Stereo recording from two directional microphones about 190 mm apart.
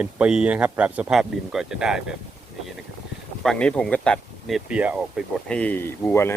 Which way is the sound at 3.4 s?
5° left (ahead or behind).